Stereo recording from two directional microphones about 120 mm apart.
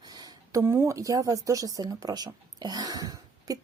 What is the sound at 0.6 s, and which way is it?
Speech, 20° right (ahead or behind).